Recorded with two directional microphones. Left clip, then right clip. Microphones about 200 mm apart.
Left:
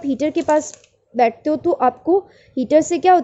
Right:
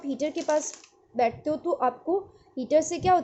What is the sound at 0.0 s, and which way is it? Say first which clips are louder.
A woman's voice: left 9 dB; 40° left (ahead or behind).